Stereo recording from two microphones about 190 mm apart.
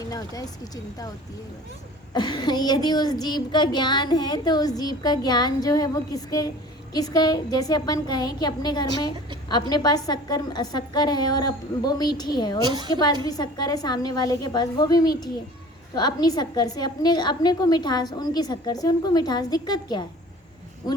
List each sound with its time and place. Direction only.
0.0 s a child's voice: 20° left (ahead or behind)
2.1 s a child's voice: 20° left (ahead or behind)
12.6 s a woman's voice: 25° right (ahead or behind)
13.2 s a child's voice: 20° left (ahead or behind)